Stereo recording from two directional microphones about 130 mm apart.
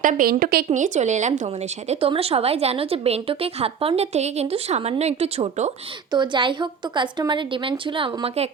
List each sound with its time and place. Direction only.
0.0 s a woman's voice: 90° right; by 1.3 s 65° right (ahead or behind)
1.4 s a woman's voice: 55° right (ahead or behind)
6.1 s a woman's voice: 35° right (ahead or behind)